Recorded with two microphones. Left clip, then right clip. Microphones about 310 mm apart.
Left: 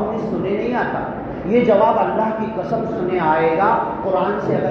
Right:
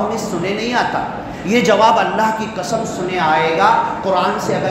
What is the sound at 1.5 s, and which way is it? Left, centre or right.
Speech, right.